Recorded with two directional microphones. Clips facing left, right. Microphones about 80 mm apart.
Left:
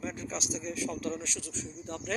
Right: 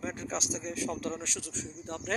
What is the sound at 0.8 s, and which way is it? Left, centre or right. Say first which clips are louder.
Speech: right 1 dB; right.